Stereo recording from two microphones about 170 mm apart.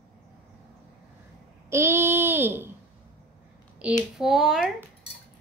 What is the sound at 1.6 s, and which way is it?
Child singing, 15° right (ahead or behind).